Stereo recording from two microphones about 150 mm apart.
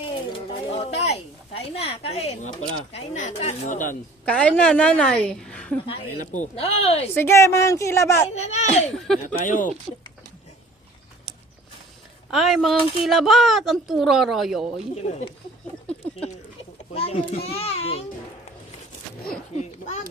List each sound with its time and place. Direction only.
0.3 s speech: 35° left (ahead or behind); by 3.9 s 60° left (ahead or behind)
4.3 s a woman's voice: 10° left (ahead or behind)
6.6 s a child's voice: 45° left (ahead or behind)
7.2 s speech: 20° left (ahead or behind)
8.4 s a child's voice: 50° left (ahead or behind)
9.2 s speech: 60° left (ahead or behind)
12.3 s speech: centre (ahead or behind)
14.9 s a child's voice: 50° left (ahead or behind)
16.9 s a child's voice: 40° left (ahead or behind)
19.5 s a child's voice: 50° left (ahead or behind)